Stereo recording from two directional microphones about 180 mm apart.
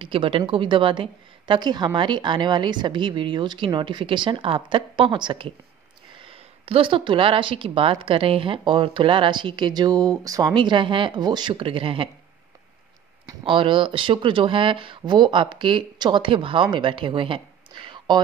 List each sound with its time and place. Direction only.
0.0 s a woman's voice: 30° right (ahead or behind)
6.6 s a woman's voice: 30° right (ahead or behind)
13.4 s a woman's voice: 30° right (ahead or behind)